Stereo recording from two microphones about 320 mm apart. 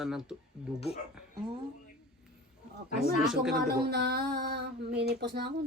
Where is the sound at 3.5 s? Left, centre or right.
Right.